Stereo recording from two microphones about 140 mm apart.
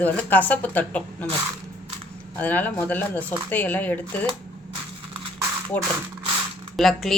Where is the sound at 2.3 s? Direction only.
10° left (ahead or behind).